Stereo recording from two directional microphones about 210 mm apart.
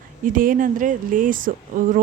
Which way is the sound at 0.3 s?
40° right (ahead or behind).